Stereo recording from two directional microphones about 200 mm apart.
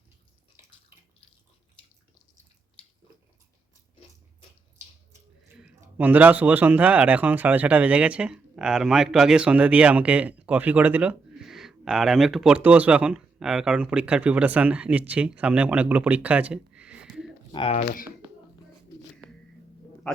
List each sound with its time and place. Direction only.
5.5 s speech: 5° right (ahead or behind)
17.5 s speech: 25° left (ahead or behind)